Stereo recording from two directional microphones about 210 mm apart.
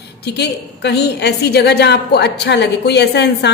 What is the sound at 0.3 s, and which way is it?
A woman's voice, 55° left (ahead or behind).